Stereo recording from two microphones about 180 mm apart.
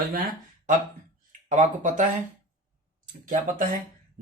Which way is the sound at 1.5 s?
45° right (ahead or behind).